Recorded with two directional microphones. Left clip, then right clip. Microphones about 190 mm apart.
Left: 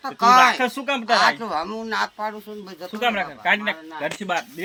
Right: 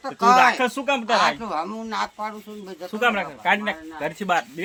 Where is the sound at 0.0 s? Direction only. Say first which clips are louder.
Left 1 dB; 15° left (ahead or behind).